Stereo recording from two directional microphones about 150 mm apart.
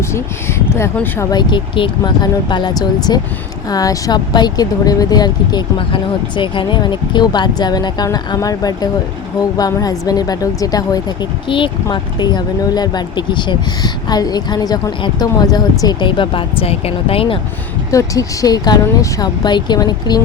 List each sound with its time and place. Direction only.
0.1 s speech: 15° left (ahead or behind)
1.3 s speech: 30° left (ahead or behind)
17.9 s speech: 20° left (ahead or behind)